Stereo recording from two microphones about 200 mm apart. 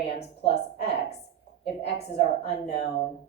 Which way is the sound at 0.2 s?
30° left (ahead or behind).